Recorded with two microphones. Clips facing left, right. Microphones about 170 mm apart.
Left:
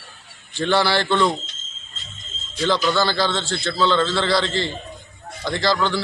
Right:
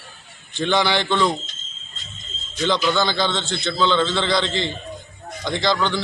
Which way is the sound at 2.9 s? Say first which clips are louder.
Even; 5° left (ahead or behind).